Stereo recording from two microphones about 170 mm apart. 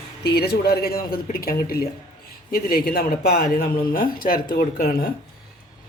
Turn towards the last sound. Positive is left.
turn(degrees=60)  # may be behind; listen again after turning